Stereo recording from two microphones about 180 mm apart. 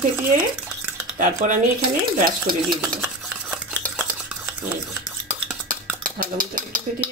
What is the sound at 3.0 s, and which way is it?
Stir, 10° right (ahead or behind).